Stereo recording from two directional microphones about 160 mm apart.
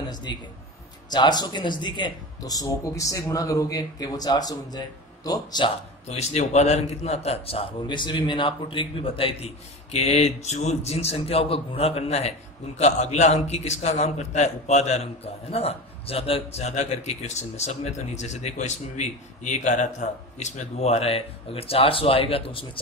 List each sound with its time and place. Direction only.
0.1 s a man's voice: 25° left (ahead or behind)
6.0 s a man's voice: 45° left (ahead or behind)